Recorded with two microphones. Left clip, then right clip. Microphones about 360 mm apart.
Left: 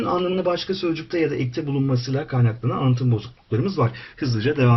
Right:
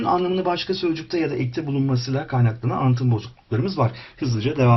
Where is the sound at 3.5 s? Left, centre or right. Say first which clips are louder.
Even; centre.